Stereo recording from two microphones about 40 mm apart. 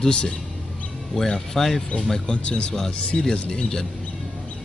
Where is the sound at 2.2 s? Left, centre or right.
Left.